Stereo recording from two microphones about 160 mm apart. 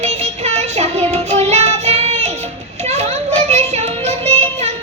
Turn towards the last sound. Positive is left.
turn(degrees=-40)  # may be behind; listen again after turning